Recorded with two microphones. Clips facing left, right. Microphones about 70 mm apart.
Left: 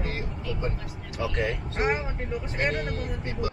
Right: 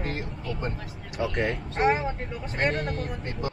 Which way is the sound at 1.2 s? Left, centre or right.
Centre.